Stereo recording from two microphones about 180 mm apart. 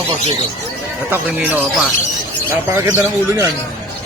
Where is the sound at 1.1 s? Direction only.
10° right (ahead or behind).